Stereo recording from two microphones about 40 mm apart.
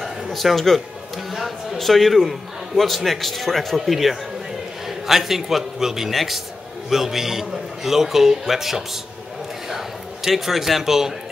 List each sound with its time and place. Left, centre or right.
0.0 s music: centre
1.3 s a man's voice: centre